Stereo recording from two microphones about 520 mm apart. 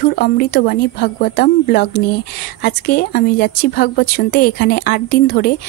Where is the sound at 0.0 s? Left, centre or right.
Centre.